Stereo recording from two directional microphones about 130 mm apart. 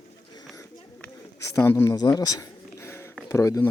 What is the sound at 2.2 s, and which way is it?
Speech, 30° left (ahead or behind).